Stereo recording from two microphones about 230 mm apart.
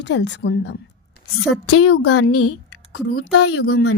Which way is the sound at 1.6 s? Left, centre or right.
Left.